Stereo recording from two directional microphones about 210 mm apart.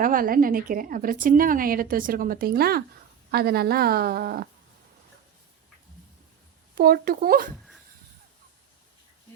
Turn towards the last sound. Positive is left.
turn(degrees=-45)  # may be behind; listen again after turning